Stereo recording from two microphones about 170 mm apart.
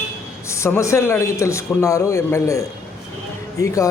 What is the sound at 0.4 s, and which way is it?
A man's voice, 15° left (ahead or behind).